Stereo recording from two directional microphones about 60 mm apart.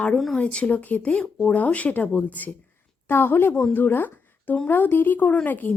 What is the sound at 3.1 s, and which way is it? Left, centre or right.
Speech, left.